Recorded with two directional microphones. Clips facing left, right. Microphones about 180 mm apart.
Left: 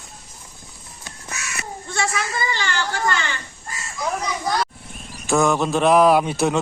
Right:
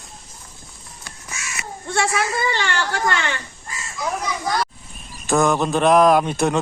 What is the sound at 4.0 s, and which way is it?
A man's voice, centre (ahead or behind).